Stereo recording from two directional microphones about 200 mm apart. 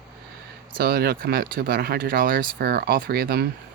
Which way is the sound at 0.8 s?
50° right (ahead or behind).